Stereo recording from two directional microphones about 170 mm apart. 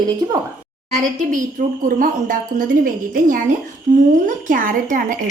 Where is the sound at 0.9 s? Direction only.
45° right (ahead or behind).